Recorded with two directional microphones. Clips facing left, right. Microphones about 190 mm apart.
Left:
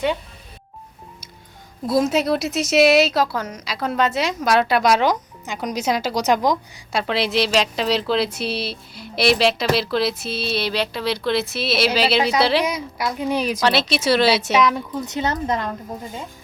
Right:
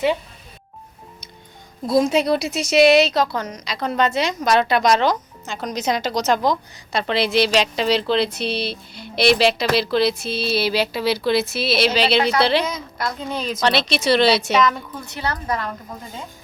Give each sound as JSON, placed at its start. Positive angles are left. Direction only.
{"t": 1.9, "sound": "speech", "side_deg": 5}
{"t": 15.0, "sound": "speech", "side_deg": 20}